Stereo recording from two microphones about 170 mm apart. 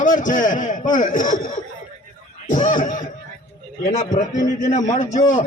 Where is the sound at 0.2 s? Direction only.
50° left (ahead or behind).